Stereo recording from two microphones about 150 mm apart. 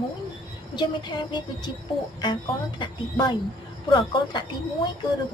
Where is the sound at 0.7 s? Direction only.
30° left (ahead or behind).